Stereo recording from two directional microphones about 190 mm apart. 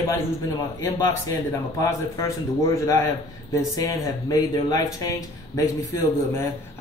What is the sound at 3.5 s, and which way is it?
Speech, 20° left (ahead or behind).